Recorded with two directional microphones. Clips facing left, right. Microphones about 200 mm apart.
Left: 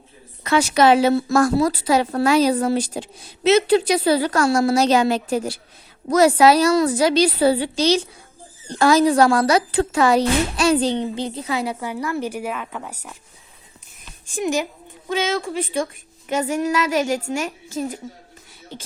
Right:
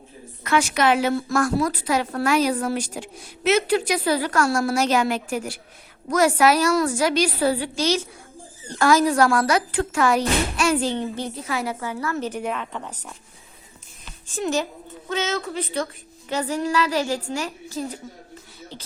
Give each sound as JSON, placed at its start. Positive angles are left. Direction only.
{"t": 0.5, "sound": "a woman's voice", "side_deg": 30}
{"t": 10.8, "sound": "a woman's voice", "side_deg": 20}
{"t": 14.3, "sound": "a woman's voice", "side_deg": 15}